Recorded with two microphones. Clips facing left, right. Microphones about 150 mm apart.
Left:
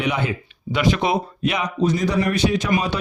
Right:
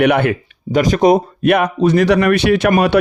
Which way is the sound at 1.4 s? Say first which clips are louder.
Right 8 dB; 60° right (ahead or behind).